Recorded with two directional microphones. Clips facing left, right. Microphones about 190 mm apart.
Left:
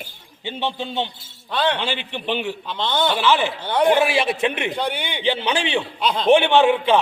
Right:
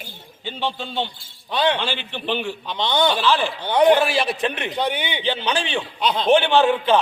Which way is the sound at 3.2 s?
20° left (ahead or behind).